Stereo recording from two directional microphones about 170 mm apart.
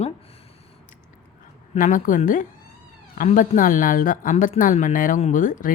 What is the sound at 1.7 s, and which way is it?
Speech, 50° left (ahead or behind).